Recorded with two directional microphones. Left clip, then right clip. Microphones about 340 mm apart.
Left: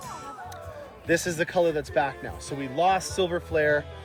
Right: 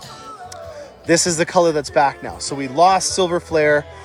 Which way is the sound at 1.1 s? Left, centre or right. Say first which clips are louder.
Right 9 dB; right.